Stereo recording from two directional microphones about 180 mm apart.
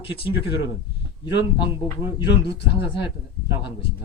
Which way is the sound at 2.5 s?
30° left (ahead or behind).